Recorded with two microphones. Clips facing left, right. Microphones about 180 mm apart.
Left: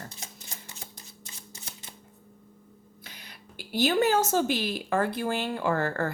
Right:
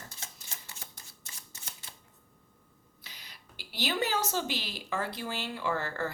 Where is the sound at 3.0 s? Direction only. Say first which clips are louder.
Left 5 dB; 55° left (ahead or behind).